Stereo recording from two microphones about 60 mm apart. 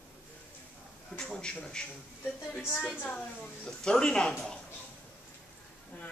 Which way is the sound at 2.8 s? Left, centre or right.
Left.